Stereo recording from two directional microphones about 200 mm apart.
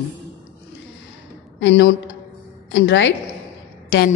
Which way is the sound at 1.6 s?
65° left (ahead or behind).